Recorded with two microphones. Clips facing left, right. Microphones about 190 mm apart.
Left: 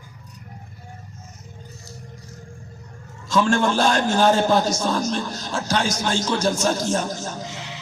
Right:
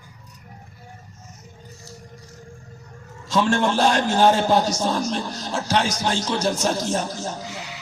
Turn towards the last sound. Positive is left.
turn(degrees=20)  # may be behind; listen again after turning